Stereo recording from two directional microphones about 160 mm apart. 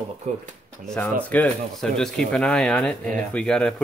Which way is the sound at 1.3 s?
5° left (ahead or behind).